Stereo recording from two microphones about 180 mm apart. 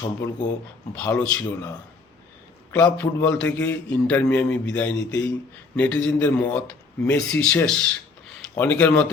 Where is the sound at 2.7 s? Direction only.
10° left (ahead or behind).